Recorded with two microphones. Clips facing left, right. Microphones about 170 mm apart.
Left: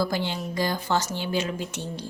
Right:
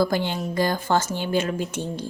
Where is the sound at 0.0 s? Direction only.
50° right (ahead or behind).